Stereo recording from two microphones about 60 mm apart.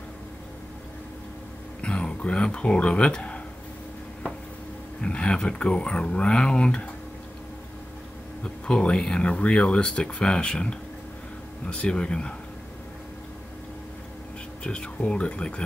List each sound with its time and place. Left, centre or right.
1.8 s speech: centre
5.0 s speech: centre
8.6 s speech: centre
14.6 s speech: centre